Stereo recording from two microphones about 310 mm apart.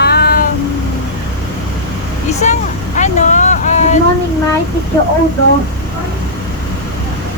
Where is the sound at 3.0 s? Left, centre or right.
Left.